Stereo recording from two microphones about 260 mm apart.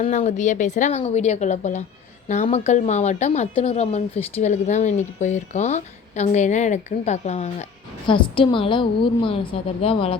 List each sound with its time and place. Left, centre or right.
0.0 s speech: left